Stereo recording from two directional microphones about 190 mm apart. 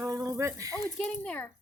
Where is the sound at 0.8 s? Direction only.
5° left (ahead or behind).